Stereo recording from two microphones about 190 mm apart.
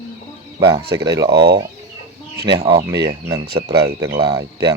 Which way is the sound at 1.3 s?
60° right (ahead or behind).